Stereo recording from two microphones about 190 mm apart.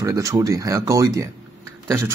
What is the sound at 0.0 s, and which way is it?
Speech, 20° right (ahead or behind).